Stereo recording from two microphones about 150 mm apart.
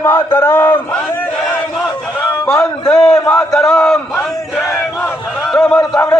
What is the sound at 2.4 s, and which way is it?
Speech, 5° left (ahead or behind).